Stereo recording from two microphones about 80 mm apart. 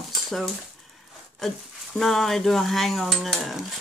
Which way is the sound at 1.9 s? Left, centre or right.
Centre.